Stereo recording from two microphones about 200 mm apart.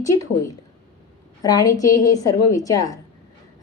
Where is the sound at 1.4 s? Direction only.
15° left (ahead or behind).